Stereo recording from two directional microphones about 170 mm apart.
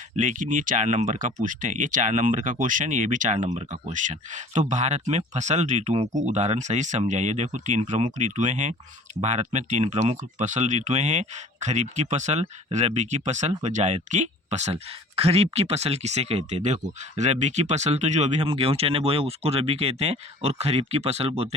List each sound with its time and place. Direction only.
0.2 s speech: 50° right (ahead or behind)